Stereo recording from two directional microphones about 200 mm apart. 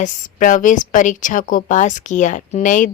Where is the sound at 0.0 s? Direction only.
40° left (ahead or behind).